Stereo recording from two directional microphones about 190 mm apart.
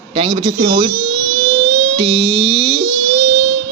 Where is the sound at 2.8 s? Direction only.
60° right (ahead or behind).